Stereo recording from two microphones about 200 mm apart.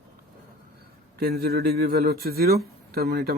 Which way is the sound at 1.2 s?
50° right (ahead or behind).